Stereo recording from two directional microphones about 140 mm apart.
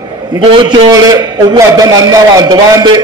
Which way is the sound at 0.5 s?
30° right (ahead or behind).